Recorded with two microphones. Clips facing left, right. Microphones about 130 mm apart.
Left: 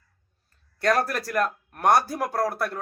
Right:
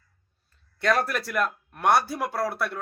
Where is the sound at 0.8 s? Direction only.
40° left (ahead or behind).